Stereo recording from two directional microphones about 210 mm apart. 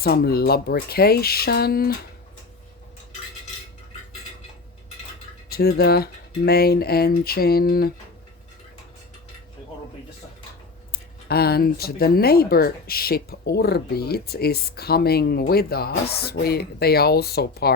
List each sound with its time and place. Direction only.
0.0 s speech: 50° left (ahead or behind)
5.5 s speech: 45° left (ahead or behind)
10.9 s speech: 50° left (ahead or behind)